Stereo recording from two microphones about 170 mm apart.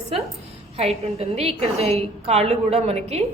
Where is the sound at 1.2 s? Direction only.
35° right (ahead or behind).